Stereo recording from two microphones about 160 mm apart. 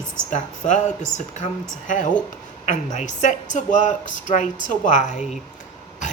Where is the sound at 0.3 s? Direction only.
50° left (ahead or behind).